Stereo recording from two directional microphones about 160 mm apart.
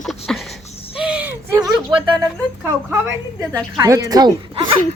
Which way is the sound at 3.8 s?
20° right (ahead or behind).